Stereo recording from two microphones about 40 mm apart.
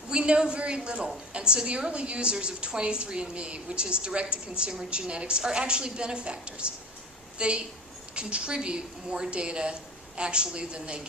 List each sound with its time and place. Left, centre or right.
0.1 s a woman's voice: right